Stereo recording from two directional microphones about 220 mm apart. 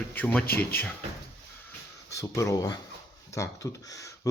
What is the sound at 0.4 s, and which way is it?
Speech, 45° left (ahead or behind).